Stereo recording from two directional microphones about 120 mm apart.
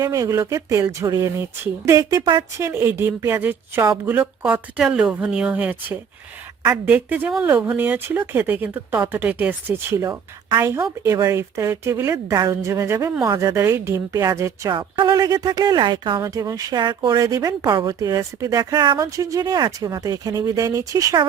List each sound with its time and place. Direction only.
0.0 s speech: 25° right (ahead or behind)
2.6 s speech: 20° right (ahead or behind)
10.0 s a woman's voice: 35° right (ahead or behind)
10.6 s speech: 20° right (ahead or behind)
14.7 s speech: 40° right (ahead or behind)
16.2 s speech: 30° right (ahead or behind)